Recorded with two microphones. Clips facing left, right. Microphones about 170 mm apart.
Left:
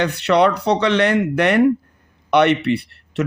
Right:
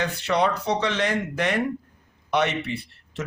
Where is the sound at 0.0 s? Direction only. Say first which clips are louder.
Left 7 dB; 70° left (ahead or behind).